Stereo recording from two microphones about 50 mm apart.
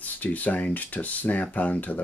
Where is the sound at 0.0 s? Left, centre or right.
Left.